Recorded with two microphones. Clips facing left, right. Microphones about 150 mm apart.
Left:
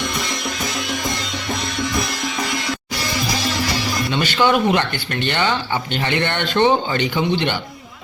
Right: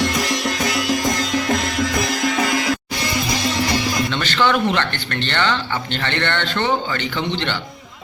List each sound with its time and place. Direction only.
0.0 s music: 90° right
4.1 s speech: 10° left (ahead or behind)